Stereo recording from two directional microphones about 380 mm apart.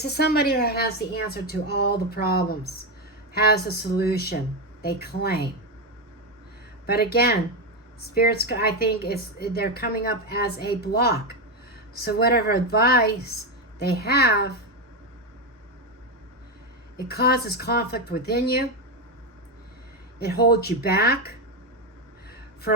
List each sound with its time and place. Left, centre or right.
0.0 s a woman's voice: left
6.8 s a woman's voice: left
17.1 s a woman's voice: left
20.1 s a woman's voice: left